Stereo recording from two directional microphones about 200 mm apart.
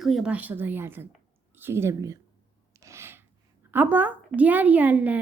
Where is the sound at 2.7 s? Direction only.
15° right (ahead or behind).